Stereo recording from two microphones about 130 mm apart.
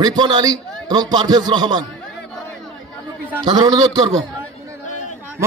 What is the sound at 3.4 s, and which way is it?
Speech, 35° right (ahead or behind).